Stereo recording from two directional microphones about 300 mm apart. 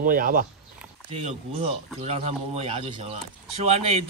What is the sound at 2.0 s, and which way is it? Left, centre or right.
Speech, right.